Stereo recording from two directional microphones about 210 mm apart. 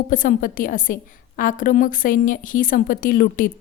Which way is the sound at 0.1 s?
40° left (ahead or behind).